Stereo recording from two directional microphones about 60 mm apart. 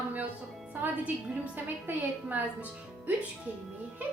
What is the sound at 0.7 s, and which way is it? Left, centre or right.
Speech, right.